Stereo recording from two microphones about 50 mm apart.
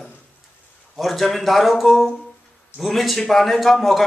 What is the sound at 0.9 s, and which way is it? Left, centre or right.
A man's voice, centre.